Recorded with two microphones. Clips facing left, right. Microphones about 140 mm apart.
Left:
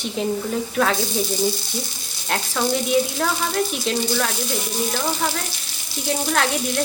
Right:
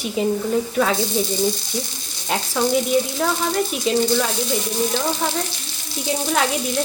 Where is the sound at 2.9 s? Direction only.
Centre (ahead or behind).